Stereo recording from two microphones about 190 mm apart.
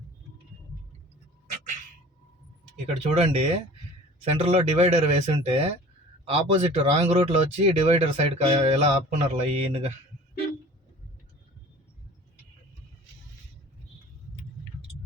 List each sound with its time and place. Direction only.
2.8 s speech: 35° right (ahead or behind)